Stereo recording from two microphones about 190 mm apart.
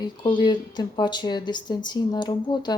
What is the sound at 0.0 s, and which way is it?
Speech, 25° left (ahead or behind).